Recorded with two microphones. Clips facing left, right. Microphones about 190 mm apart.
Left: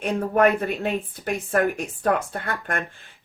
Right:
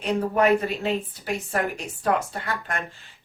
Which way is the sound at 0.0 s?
55° left (ahead or behind).